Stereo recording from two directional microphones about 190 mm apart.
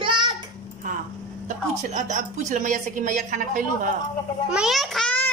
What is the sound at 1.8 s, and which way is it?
Speech, 40° right (ahead or behind).